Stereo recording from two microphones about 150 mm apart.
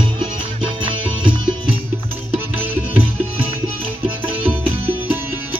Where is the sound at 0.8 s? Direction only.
35° right (ahead or behind).